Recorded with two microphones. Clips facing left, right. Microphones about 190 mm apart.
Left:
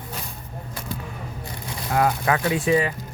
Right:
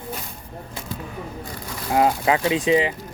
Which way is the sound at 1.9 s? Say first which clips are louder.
Right 2 dB; 20° right (ahead or behind).